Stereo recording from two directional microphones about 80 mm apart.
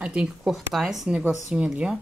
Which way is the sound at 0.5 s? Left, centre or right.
Centre.